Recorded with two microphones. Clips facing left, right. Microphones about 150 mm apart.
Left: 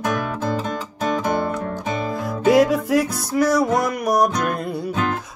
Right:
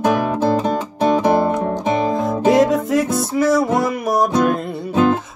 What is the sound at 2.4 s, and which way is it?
Music, centre (ahead or behind).